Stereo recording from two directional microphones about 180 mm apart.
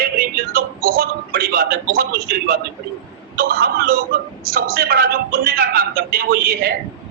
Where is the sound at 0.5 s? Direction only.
55° right (ahead or behind).